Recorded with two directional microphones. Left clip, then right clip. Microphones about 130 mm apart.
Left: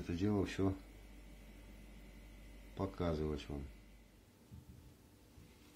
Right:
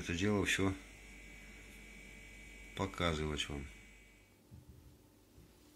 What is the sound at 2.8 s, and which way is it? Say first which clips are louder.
Speech: right 3 dB; 5° right (ahead or behind).